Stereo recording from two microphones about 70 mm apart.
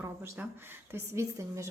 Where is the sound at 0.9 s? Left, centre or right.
Right.